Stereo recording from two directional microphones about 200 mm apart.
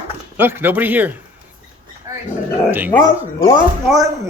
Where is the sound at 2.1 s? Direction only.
15° right (ahead or behind).